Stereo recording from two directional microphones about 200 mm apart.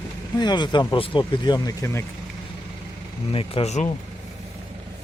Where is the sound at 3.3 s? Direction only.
30° left (ahead or behind).